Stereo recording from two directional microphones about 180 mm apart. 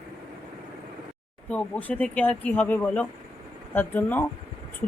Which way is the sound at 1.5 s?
10° left (ahead or behind).